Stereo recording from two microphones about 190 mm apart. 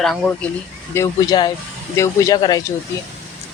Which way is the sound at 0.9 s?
15° left (ahead or behind).